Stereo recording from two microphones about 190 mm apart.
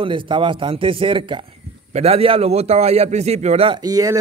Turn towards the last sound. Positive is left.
turn(degrees=-20)  # may be behind; listen again after turning